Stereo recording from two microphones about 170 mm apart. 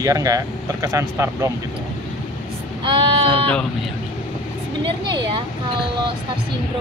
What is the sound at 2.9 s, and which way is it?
Speech, 30° right (ahead or behind).